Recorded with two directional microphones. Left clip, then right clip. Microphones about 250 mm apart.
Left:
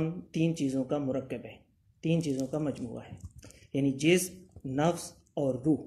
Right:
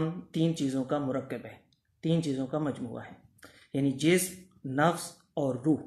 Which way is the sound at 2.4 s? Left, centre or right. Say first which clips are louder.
Right 1 dB; centre.